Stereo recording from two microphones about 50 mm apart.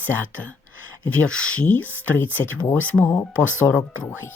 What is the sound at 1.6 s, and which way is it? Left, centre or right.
Speech, left.